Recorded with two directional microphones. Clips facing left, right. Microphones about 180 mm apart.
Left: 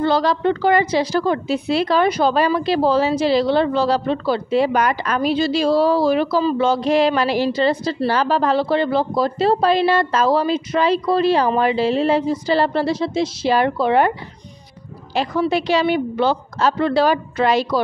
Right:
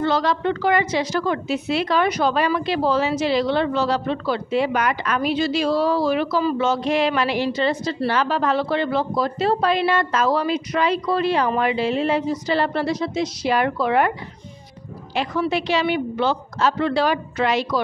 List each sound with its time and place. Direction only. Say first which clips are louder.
0.0 s a woman's voice: left 3 dB; 35° left (ahead or behind)
15.5 s a woman's voice: left 4 dB; 40° left (ahead or behind)